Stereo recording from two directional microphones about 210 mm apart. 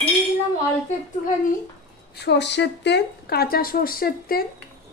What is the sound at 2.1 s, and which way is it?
A woman's voice, 55° left (ahead or behind).